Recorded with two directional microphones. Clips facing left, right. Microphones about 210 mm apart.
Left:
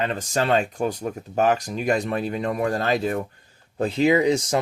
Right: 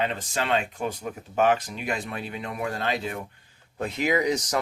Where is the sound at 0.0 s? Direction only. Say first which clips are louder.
Left 4 dB; 45° left (ahead or behind).